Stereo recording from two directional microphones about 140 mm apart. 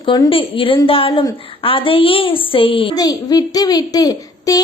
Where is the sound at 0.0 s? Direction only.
35° left (ahead or behind).